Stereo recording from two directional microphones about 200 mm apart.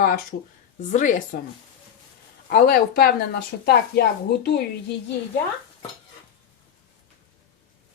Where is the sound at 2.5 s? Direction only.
50° left (ahead or behind).